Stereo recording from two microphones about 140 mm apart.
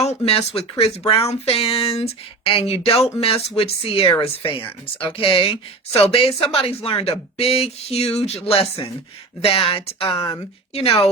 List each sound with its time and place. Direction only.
0.0 s a woman's voice: 50° left (ahead or behind)